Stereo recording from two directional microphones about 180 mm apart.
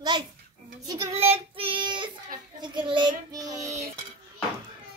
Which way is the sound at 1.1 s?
35° right (ahead or behind).